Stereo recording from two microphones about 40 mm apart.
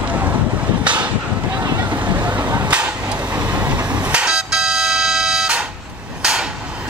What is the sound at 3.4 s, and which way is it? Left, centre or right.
Vehicle, right.